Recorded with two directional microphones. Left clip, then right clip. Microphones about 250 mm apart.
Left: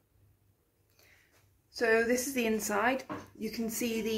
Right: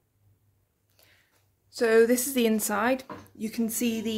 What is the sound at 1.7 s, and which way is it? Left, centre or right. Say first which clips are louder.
Speech: right 6 dB; right.